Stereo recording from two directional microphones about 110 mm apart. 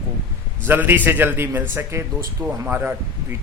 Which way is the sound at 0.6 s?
15° right (ahead or behind).